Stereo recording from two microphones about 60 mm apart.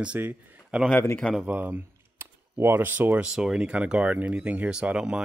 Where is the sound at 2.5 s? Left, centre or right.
Right.